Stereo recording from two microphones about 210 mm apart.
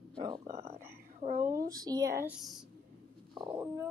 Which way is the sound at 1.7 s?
15° right (ahead or behind).